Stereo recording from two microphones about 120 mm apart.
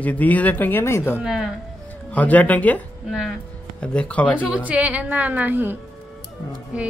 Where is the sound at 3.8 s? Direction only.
10° left (ahead or behind).